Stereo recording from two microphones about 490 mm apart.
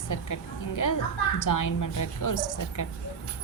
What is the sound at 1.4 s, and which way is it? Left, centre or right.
A woman's voice, left.